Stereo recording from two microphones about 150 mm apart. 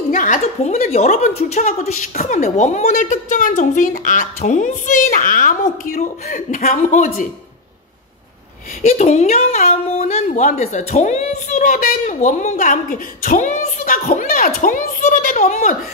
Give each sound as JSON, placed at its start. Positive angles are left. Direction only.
{"t": 0.1, "sound": "a woman's voice", "side_deg": 60}
{"t": 8.8, "sound": "a woman's voice", "side_deg": 45}